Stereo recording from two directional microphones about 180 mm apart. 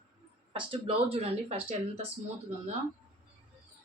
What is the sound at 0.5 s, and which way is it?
Speech, 30° right (ahead or behind).